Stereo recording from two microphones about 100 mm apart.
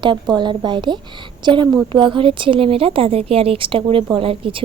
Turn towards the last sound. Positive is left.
turn(degrees=-65)  # may be behind; listen again after turning